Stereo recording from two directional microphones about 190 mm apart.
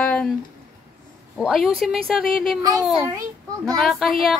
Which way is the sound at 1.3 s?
Centre (ahead or behind).